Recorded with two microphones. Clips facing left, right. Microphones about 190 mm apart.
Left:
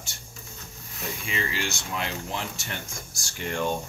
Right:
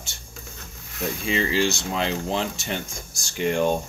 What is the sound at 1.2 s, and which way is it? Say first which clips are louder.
Speech: right 9 dB; 30° right (ahead or behind).